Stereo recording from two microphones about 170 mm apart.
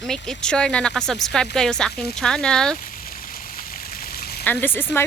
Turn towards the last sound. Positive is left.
turn(degrees=10)  # may be behind; listen again after turning